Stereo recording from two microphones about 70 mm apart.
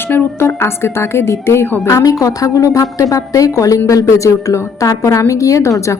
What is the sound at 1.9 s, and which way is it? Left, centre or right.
A woman's voice, left.